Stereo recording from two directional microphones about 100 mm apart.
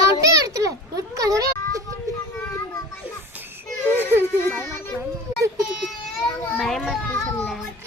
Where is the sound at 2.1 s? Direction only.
30° right (ahead or behind).